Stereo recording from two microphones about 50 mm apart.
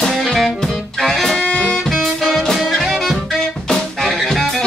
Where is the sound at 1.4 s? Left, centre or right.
Left.